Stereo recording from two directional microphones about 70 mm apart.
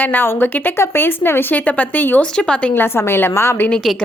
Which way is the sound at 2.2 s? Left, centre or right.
Centre.